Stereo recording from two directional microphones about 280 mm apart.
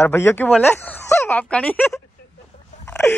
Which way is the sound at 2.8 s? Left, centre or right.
Centre.